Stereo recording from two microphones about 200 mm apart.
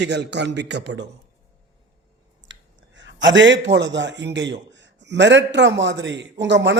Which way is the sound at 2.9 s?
65° right (ahead or behind).